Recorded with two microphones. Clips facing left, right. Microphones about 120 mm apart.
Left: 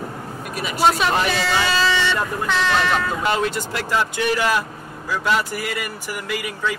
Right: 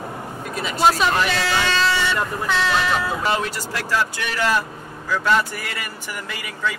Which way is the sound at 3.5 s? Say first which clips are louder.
Left 1 dB; 20° left (ahead or behind).